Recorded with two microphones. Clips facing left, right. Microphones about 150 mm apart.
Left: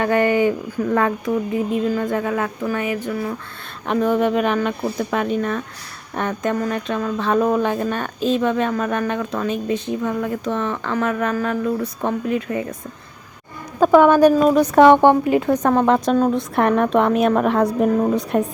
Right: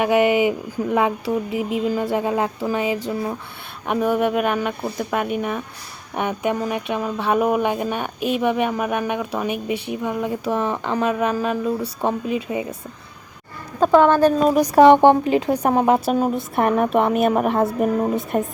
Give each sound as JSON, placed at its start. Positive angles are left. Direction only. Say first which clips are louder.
{"t": 0.0, "sound": "speech", "louder": "even", "side_deg": -15}
{"t": 1.5, "sound": "music", "louder": "left 1 dB", "side_deg": -15}
{"t": 3.8, "sound": "speech", "louder": "left 1 dB", "side_deg": -10}
{"t": 13.7, "sound": "speech", "louder": "left 2 dB", "side_deg": 5}
{"t": 14.8, "sound": "music", "louder": "even", "side_deg": -20}
{"t": 15.5, "sound": "a woman's voice", "louder": "left 1 dB", "side_deg": -10}